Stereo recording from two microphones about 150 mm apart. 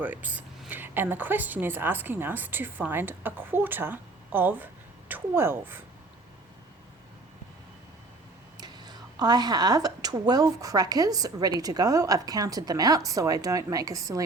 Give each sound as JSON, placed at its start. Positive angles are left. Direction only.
{"t": 0.0, "sound": "a woman's voice", "side_deg": -10}
{"t": 8.5, "sound": "a woman's voice", "side_deg": -30}